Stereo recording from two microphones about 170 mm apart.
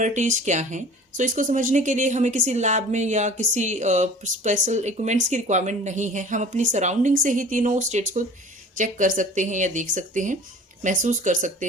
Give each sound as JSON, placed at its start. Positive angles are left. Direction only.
{"t": 0.0, "sound": "speech", "side_deg": -45}